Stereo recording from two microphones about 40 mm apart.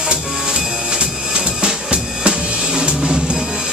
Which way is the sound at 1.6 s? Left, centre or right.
Right.